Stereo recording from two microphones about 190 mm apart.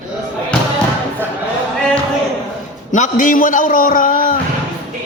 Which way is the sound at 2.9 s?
40° left (ahead or behind).